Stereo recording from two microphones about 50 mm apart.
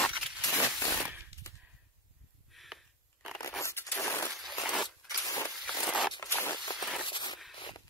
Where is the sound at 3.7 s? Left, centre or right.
Left.